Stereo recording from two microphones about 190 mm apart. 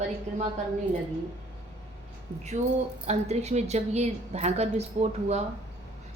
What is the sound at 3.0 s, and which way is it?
A woman's voice, 35° right (ahead or behind).